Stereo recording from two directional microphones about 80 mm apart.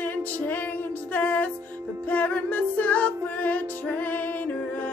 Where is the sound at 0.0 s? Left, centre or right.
Left.